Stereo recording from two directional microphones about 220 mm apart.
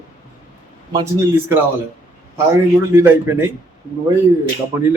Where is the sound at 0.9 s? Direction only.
15° right (ahead or behind).